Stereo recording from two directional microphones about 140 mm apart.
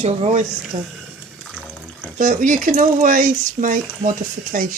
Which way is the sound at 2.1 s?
70° right (ahead or behind).